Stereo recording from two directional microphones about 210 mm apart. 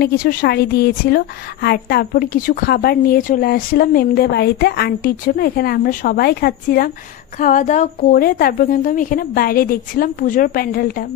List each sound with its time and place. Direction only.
0.0 s a woman's voice: 45° left (ahead or behind)